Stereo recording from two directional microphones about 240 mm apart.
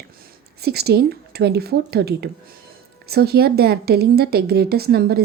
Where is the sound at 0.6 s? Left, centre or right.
Right.